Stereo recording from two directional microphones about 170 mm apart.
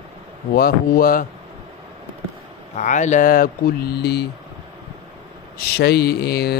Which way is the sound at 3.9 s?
75° left (ahead or behind).